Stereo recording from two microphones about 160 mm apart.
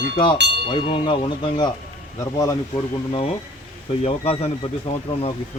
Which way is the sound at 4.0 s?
40° left (ahead or behind).